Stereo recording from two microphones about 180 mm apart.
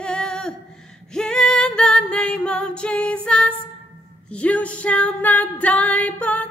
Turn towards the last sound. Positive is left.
turn(degrees=10)  # may be behind; listen again after turning